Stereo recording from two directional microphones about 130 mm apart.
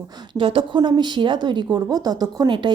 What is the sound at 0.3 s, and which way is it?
Speech, 40° right (ahead or behind).